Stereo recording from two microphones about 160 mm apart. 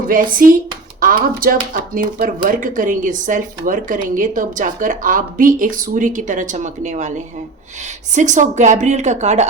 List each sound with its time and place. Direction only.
0.1 s speech: 60° right (ahead or behind)
8.1 s a woman's voice: 50° right (ahead or behind)